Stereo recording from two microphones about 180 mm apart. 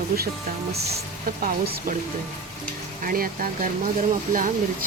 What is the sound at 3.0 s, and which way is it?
Speech, 50° right (ahead or behind).